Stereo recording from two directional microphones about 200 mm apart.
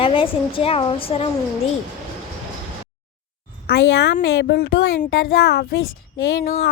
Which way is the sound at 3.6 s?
55° left (ahead or behind).